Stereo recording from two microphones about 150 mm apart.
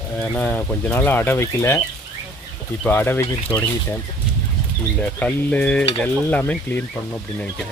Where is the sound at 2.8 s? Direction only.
15° left (ahead or behind).